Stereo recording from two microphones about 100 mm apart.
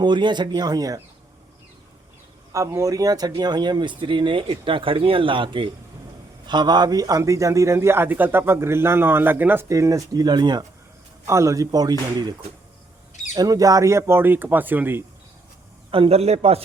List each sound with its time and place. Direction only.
0.0 s speech: 50° right (ahead or behind)
2.5 s speech: 30° right (ahead or behind); by 5.7 s 55° right (ahead or behind)
6.5 s a man's voice: 45° right (ahead or behind); by 9.6 s 20° right (ahead or behind)
9.6 s speech: 30° right (ahead or behind)
11.3 s speech: 30° right (ahead or behind)
13.3 s a man's voice: 35° right (ahead or behind); by 15.0 s 20° right (ahead or behind)
15.9 s a man's voice: 75° right (ahead or behind); by 16.6 s 90° right